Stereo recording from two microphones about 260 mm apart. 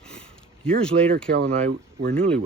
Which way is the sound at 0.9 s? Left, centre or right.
Right.